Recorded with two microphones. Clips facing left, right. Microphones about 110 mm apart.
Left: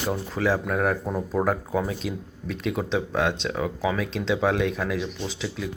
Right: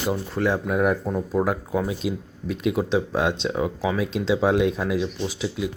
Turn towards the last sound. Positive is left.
turn(degrees=-15)  # may be behind; listen again after turning